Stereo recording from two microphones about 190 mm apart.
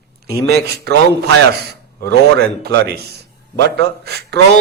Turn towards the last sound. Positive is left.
turn(degrees=-60)  # may be behind; listen again after turning